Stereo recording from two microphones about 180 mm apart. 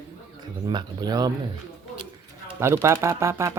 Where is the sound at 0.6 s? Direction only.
25° right (ahead or behind).